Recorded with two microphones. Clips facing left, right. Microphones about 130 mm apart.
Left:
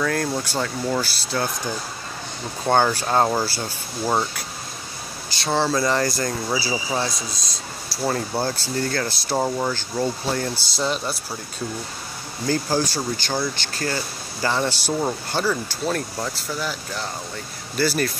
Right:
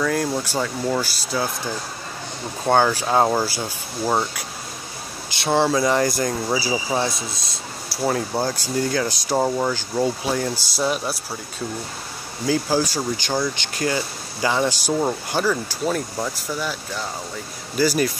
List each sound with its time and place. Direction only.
0.0 s speech: 5° right (ahead or behind)
2.6 s speech: 5° right (ahead or behind)
5.4 s speech: 15° right (ahead or behind)
6.2 s speech: 5° right (ahead or behind)
12.4 s speech: 5° right (ahead or behind)
17.7 s speech: 10° right (ahead or behind)